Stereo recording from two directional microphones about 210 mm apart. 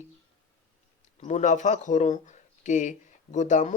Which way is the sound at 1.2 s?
35° left (ahead or behind).